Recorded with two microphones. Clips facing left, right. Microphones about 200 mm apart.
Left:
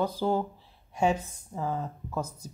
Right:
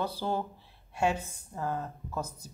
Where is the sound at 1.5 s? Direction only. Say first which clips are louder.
Left 2 dB; 5° left (ahead or behind).